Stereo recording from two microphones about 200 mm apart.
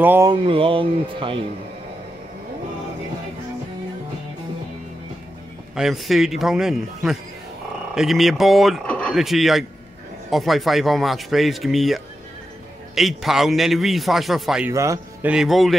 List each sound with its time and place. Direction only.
0.0 s a sound: 10° right (ahead or behind)
0.3 s speech: 25° right (ahead or behind)
5.8 s speech: centre (ahead or behind)
14.7 s a man's voice: 15° right (ahead or behind)
15.3 s speech: centre (ahead or behind)